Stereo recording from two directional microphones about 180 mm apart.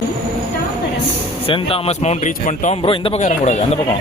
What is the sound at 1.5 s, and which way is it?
Speech, 30° left (ahead or behind).